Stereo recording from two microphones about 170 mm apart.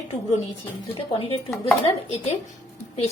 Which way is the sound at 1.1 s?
35° left (ahead or behind).